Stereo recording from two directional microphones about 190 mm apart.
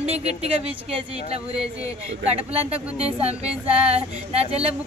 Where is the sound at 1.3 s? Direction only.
30° right (ahead or behind).